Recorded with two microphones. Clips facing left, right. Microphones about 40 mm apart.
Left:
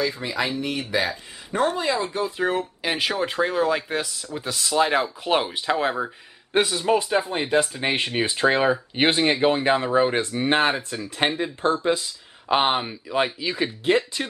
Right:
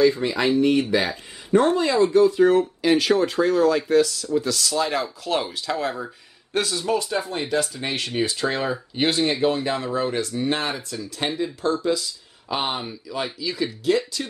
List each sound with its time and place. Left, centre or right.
0.0 s speech: centre; by 14.2 s left